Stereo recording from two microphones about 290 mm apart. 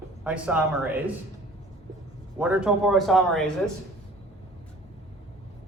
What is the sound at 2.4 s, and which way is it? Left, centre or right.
Speech, centre.